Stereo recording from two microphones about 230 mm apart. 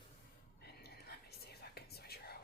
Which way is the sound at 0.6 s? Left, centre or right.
Left.